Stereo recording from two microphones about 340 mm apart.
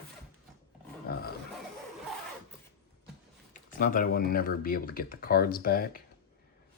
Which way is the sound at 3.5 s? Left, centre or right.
Left.